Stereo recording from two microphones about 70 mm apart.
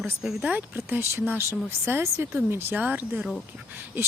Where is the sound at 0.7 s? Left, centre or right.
Right.